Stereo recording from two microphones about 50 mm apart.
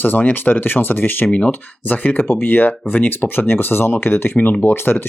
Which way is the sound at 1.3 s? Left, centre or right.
Left.